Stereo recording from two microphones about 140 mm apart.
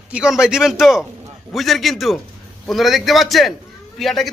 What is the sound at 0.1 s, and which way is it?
A man's voice, 5° right (ahead or behind).